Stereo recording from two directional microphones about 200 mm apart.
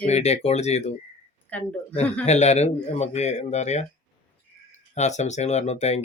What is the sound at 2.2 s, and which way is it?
Speech, 35° left (ahead or behind).